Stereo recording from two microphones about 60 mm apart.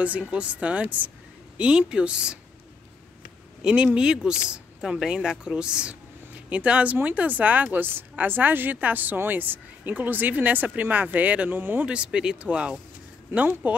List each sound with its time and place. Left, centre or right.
0.0 s a woman's voice: right
1.6 s speech: centre
3.6 s a woman's voice: centre
11.9 s a woman's voice: centre